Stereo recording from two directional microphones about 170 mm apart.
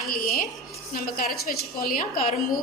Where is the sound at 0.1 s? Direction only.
60° left (ahead or behind).